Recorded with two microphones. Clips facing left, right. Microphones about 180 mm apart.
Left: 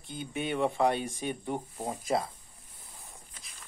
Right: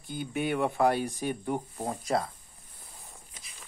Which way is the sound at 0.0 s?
25° left (ahead or behind).